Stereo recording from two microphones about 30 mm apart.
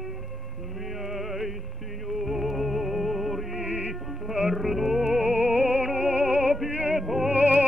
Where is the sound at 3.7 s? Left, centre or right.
Right.